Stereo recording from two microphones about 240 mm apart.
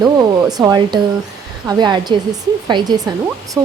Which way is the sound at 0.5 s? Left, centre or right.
Centre.